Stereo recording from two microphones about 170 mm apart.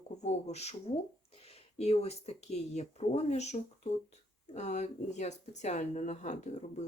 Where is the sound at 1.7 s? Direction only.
40° left (ahead or behind).